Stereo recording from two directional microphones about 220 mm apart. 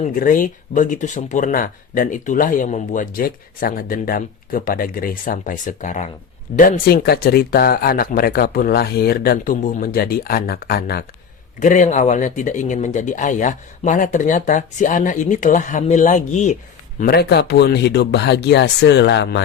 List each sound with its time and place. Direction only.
0.0 s speech: 40° left (ahead or behind)
17.0 s speech: 45° left (ahead or behind)